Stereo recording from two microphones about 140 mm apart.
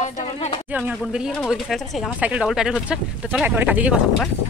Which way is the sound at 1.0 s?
Centre (ahead or behind).